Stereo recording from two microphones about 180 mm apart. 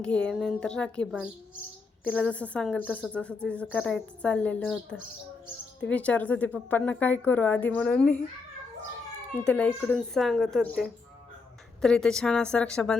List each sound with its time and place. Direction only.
0.0 s a woman's voice: 5° left (ahead or behind)
2.0 s a woman's voice: 5° left (ahead or behind)
2.8 s speech: 5° right (ahead or behind)
3.1 s a woman's voice: 5° left (ahead or behind)
5.8 s a woman's voice: 5° left (ahead or behind)
9.3 s a woman's voice: 10° left (ahead or behind)